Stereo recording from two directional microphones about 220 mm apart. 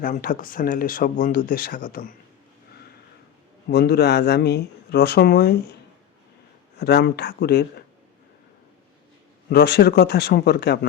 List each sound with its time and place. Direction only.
0.0 s speech: 40° left (ahead or behind)
3.7 s speech: 45° left (ahead or behind)
6.7 s speech: 50° left (ahead or behind)
9.5 s speech: 45° left (ahead or behind)